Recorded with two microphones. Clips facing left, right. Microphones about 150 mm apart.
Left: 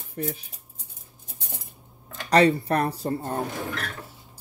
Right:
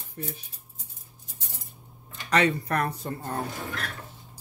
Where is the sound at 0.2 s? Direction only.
85° left.